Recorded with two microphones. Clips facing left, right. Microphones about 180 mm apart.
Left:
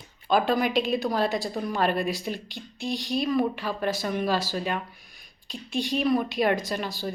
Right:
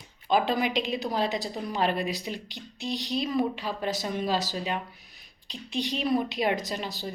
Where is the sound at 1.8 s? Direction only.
50° left (ahead or behind).